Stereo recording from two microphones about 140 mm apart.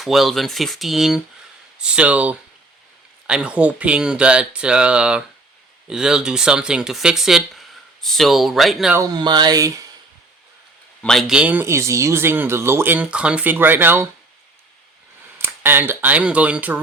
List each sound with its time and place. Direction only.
0.0 s speech: centre (ahead or behind)
9.0 s speech: 30° right (ahead or behind)
11.0 s speech: centre (ahead or behind); by 14.1 s 15° right (ahead or behind)
15.4 s speech: 15° right (ahead or behind)